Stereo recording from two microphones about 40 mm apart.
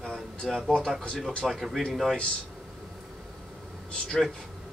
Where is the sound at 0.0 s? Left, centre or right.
Centre.